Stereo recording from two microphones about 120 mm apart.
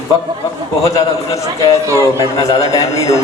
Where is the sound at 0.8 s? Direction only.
25° left (ahead or behind).